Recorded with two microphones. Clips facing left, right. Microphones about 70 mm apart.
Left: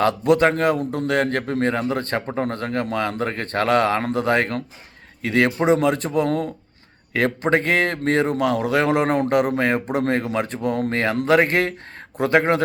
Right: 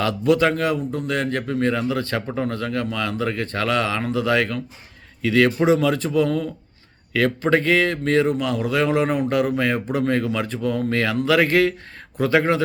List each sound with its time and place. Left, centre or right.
0.0 s a man's voice: left
7.5 s a man's voice: left